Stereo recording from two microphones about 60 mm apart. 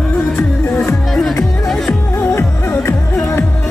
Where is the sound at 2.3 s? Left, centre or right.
Left.